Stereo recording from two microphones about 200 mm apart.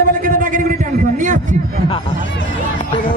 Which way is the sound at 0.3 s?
45° right (ahead or behind).